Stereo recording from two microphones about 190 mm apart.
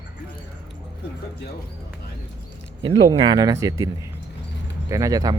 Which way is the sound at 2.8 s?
25° right (ahead or behind).